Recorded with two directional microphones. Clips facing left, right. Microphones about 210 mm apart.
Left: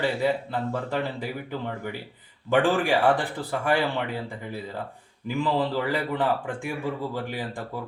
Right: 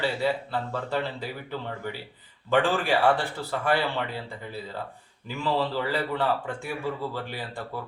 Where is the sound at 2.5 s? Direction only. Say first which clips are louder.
Left 2 dB; 15° left (ahead or behind).